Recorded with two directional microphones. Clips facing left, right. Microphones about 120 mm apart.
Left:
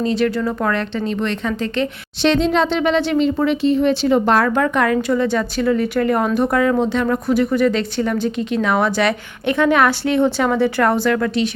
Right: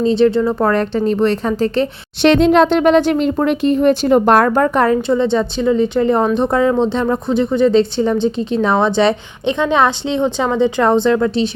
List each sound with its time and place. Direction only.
0.0 s speech: 25° right (ahead or behind)
0.7 s a woman's voice: 40° right (ahead or behind)
2.2 s speech: 60° right (ahead or behind); by 11.5 s 25° right (ahead or behind)